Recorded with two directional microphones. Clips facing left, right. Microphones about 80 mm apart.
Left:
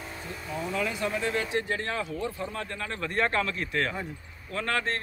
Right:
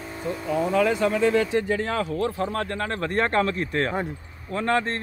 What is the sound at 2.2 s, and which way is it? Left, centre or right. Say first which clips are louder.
A man's voice: right 8 dB; right.